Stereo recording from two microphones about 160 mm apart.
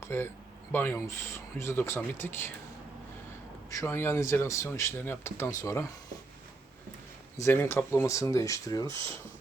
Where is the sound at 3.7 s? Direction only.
15° left (ahead or behind).